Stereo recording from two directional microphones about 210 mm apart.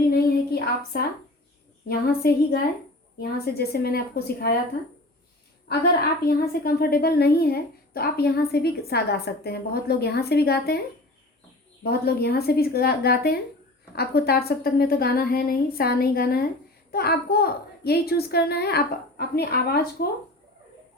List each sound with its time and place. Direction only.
0.1 s a sound: 45° left (ahead or behind)
1.9 s a woman's voice: 45° left (ahead or behind)
6.2 s a woman's voice: 45° left (ahead or behind)
11.8 s a woman's voice: 50° left (ahead or behind)